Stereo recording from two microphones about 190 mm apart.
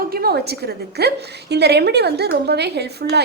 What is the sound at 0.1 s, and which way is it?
A woman's voice, 55° right (ahead or behind).